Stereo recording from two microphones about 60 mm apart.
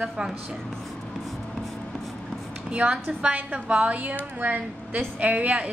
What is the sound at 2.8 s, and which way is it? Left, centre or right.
A woman's voice, right.